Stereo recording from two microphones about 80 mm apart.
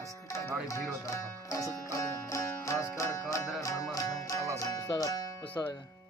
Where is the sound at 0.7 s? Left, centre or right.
Left.